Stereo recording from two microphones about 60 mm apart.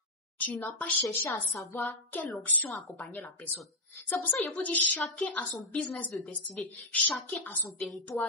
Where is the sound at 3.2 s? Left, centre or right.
Left.